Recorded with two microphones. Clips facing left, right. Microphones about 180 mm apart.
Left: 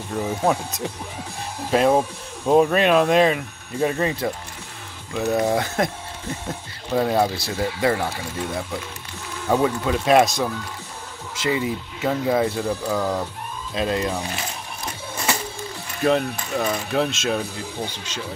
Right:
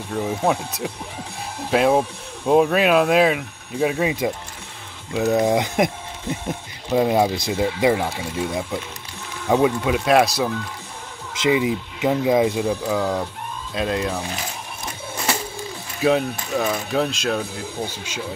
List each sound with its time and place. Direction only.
0.1 s speech: 5° left (ahead or behind)
11.3 s speech: 20° right (ahead or behind); by 14.2 s centre (ahead or behind)
16.0 s speech: 5° right (ahead or behind)